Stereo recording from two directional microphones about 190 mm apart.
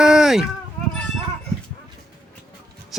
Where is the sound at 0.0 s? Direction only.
5° right (ahead or behind).